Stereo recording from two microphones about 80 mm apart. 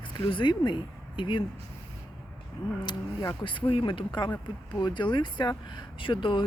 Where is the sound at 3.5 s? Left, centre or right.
Left.